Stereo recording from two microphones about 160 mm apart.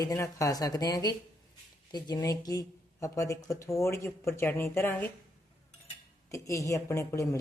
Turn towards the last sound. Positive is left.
turn(degrees=20)  # may be behind; listen again after turning